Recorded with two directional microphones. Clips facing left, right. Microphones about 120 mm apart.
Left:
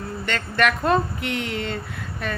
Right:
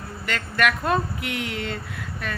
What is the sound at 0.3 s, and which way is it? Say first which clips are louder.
Speech: left 1 dB; centre (ahead or behind).